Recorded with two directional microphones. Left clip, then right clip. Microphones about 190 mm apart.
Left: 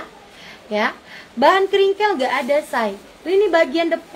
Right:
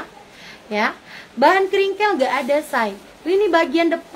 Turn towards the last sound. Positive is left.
turn(degrees=-25)  # may be behind; listen again after turning